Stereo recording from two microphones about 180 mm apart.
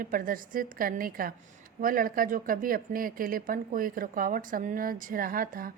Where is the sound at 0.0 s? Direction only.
50° right (ahead or behind).